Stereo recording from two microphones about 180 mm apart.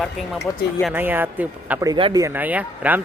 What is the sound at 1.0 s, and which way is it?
Speech, 10° right (ahead or behind).